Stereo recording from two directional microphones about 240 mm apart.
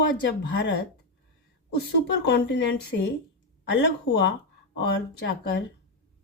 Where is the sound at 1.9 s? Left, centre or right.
Left.